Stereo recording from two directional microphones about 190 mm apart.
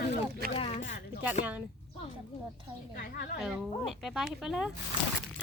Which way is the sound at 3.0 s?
50° left (ahead or behind).